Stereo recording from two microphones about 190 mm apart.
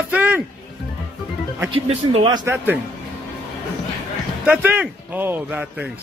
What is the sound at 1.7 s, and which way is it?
Speech, 30° right (ahead or behind).